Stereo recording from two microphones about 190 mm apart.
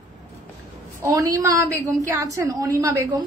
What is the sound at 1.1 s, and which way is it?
A woman's voice, 15° right (ahead or behind).